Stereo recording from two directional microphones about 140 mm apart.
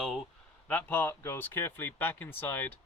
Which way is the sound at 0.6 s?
15° left (ahead or behind).